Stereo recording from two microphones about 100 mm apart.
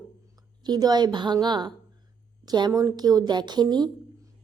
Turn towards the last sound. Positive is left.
turn(degrees=-45)  # may be behind; listen again after turning